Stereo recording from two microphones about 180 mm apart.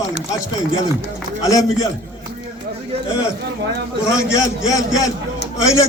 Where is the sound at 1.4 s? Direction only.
20° left (ahead or behind).